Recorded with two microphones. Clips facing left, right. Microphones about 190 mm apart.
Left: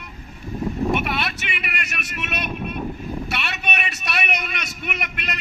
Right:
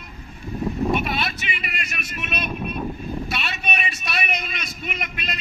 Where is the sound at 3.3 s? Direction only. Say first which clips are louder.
Even; 70° left (ahead or behind).